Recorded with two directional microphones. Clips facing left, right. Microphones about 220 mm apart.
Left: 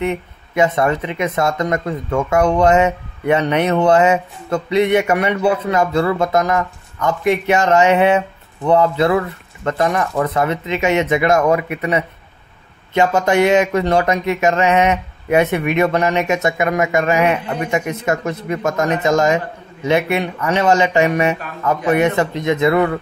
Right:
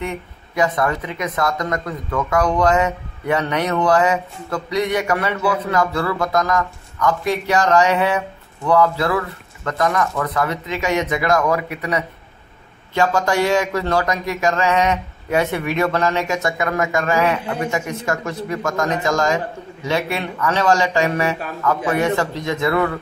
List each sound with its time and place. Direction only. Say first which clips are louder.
0.0 s speech: left 6 dB; 20° left (ahead or behind)